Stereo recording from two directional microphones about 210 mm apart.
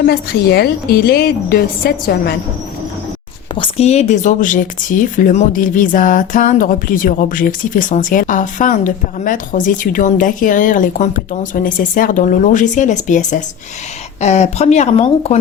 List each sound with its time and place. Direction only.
0.0 s a woman's voice: 50° left (ahead or behind)
3.5 s speech: 25° left (ahead or behind)